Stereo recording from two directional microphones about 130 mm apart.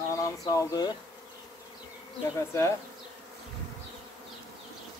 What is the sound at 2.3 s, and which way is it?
Speech, 20° left (ahead or behind).